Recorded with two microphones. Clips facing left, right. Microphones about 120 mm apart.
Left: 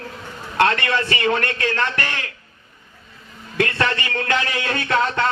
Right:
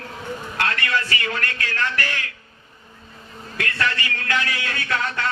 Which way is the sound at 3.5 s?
25° left (ahead or behind).